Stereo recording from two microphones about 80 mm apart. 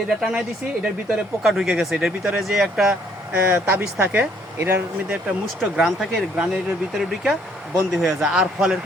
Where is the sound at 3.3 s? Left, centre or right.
Right.